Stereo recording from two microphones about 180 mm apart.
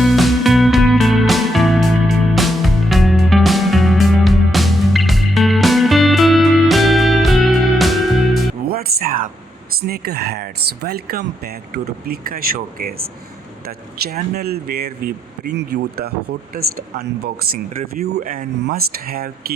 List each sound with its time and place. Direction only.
0.0 s music: centre (ahead or behind)
8.7 s a sound: 55° right (ahead or behind)
9.8 s speech: 60° right (ahead or behind)
14.0 s speech: 60° right (ahead or behind)